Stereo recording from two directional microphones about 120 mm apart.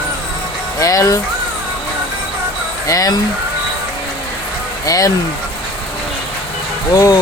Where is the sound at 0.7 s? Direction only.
30° left (ahead or behind).